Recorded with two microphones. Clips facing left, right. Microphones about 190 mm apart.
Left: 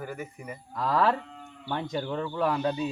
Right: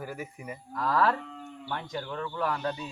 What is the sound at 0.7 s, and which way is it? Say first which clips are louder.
Speech: left 1 dB; 20° left (ahead or behind).